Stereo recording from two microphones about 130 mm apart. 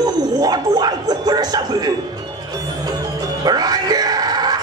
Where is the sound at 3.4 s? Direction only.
30° right (ahead or behind).